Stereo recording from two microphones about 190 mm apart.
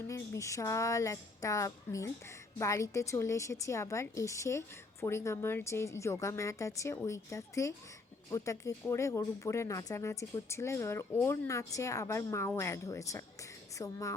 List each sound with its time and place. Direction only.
0.1 s a woman's voice: 15° left (ahead or behind)